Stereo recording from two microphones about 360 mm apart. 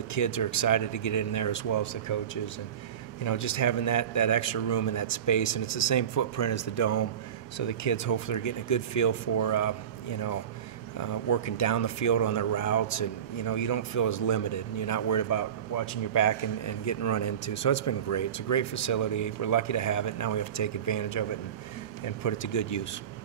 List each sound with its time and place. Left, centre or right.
0.1 s speech: left
11.0 s speech: left